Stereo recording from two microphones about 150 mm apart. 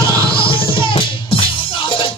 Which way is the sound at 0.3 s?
35° left (ahead or behind).